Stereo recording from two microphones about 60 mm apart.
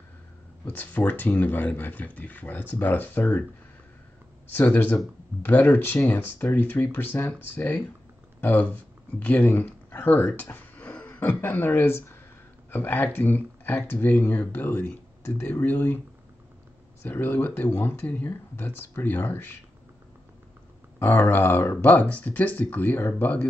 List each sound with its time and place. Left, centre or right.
0.7 s speech: left
4.6 s speech: left
10.5 s a sound: left
11.4 s speech: left
17.0 s speech: left
21.0 s speech: left